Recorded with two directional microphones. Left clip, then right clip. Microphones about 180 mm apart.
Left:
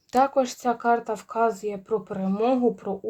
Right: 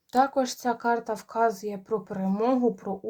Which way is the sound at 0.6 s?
25° left (ahead or behind).